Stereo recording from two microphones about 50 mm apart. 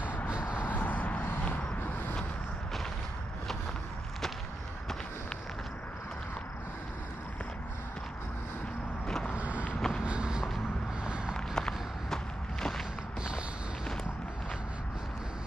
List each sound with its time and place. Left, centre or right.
0.3 s vehicle: centre
0.7 s a sound: left
1.8 s a sound: left
9.0 s vehicle: centre
9.3 s vehicle: right
9.8 s vehicle: centre
10.0 s vehicle: centre
11.1 s a sound: centre
11.3 s walk: centre